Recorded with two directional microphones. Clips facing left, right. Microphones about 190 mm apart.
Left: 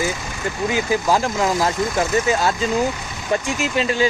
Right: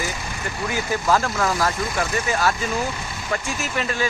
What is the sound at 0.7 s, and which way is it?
Speech, 20° left (ahead or behind).